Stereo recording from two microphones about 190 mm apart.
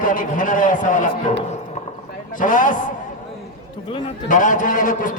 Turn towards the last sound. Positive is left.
turn(degrees=45)  # may be behind; listen again after turning